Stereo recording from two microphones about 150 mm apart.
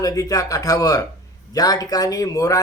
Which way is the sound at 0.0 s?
25° left (ahead or behind).